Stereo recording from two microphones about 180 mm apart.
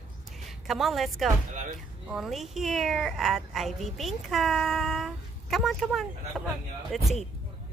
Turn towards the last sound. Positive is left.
turn(degrees=0)  # may be behind; listen again after turning